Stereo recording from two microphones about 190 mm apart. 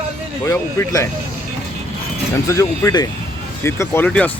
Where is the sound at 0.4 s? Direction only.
15° left (ahead or behind).